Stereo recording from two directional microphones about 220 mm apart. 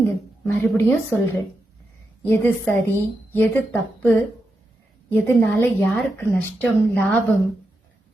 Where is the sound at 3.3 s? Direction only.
10° left (ahead or behind).